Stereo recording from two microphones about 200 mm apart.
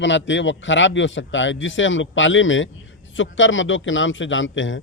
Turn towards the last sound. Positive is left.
turn(degrees=70)  # may be behind; listen again after turning